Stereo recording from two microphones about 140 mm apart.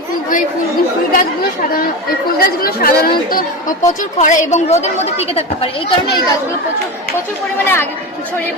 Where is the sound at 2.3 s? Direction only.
90° left.